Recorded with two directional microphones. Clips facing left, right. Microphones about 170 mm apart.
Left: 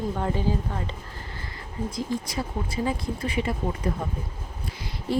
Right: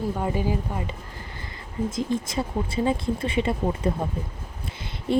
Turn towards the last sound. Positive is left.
turn(degrees=-25)  # may be behind; listen again after turning